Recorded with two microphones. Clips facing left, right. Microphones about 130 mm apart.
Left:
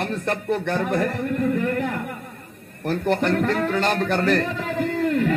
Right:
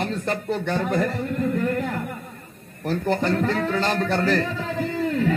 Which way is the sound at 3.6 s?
60° left (ahead or behind).